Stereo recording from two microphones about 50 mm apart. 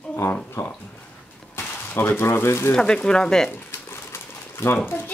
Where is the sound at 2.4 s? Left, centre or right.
Left.